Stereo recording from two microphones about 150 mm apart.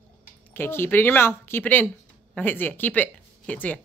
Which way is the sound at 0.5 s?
15° left (ahead or behind).